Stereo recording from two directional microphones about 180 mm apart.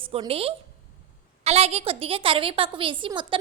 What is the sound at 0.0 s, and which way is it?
A woman's voice, 30° right (ahead or behind).